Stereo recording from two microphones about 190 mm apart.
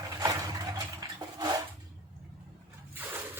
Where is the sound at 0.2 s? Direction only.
20° right (ahead or behind).